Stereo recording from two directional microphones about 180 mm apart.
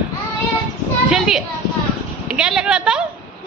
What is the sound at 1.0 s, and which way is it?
Speech, 5° right (ahead or behind).